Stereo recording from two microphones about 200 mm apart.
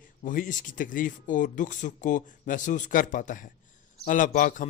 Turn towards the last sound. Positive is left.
turn(degrees=45)  # may be behind; listen again after turning